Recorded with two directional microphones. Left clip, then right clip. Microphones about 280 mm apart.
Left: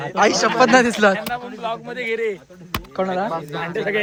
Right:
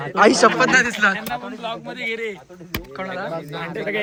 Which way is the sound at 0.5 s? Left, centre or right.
Centre.